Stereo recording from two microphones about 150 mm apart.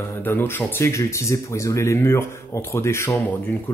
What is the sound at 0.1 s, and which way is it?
Speech, 15° left (ahead or behind).